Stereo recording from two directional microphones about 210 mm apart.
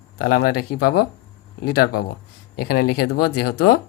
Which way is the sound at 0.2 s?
45° left (ahead or behind).